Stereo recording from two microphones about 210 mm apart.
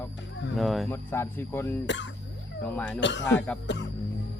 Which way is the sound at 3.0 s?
60° left (ahead or behind).